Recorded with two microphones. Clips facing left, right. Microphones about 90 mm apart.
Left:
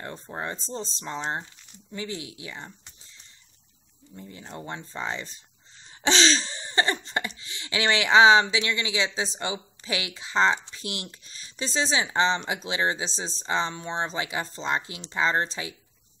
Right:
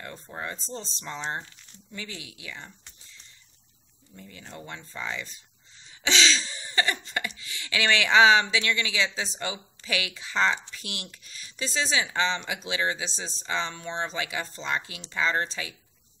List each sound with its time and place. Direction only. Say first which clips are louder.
0.0 s speech: left 3 dB; 30° left (ahead or behind)
4.1 s speech: left 3 dB; 25° left (ahead or behind)